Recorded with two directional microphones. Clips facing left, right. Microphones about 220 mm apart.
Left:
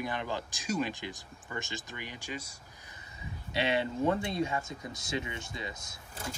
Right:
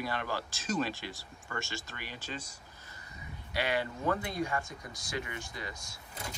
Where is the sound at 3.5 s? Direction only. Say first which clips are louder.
Left 3 dB; 25° left (ahead or behind).